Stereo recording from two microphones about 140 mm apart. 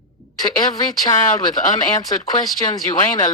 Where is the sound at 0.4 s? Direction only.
30° left (ahead or behind).